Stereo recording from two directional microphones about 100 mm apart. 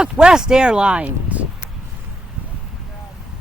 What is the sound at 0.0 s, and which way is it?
Speech, 5° right (ahead or behind).